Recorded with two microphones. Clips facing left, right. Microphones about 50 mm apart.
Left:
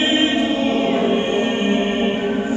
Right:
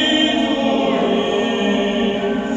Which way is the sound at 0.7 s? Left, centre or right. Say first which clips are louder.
Right 1 dB; centre.